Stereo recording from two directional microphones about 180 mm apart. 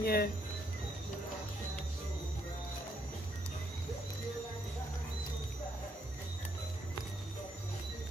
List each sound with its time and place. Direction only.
0.0 s speech: 60° left (ahead or behind)